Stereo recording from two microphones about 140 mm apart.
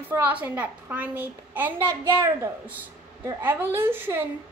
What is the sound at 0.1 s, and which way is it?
A child's voice, 10° right (ahead or behind).